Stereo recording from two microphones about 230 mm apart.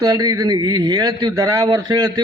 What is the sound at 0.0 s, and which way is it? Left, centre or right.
A man's voice, centre.